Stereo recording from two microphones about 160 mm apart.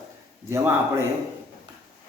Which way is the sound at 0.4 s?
15° right (ahead or behind).